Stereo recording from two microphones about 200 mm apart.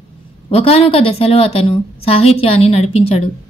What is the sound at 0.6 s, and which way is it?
A woman's voice, 30° left (ahead or behind).